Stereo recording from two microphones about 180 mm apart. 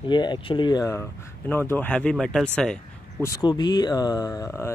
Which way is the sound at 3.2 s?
20° left (ahead or behind).